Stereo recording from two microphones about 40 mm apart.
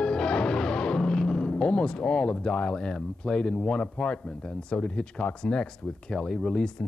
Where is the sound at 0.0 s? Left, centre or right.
Left.